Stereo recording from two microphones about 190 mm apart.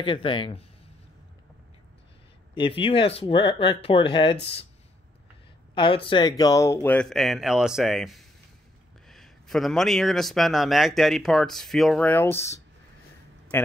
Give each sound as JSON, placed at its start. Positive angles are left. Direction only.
{"t": 0.0, "sound": "speech", "side_deg": 25}
{"t": 2.5, "sound": "speech", "side_deg": 25}
{"t": 5.8, "sound": "a man's voice", "side_deg": 25}